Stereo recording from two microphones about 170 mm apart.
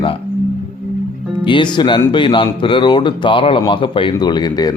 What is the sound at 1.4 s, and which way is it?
Speech, 30° left (ahead or behind).